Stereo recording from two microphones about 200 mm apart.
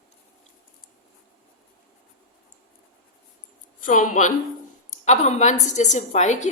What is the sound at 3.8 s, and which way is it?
A woman's voice, 40° left (ahead or behind).